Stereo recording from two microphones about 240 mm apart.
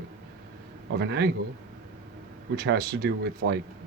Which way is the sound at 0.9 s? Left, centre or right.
Right.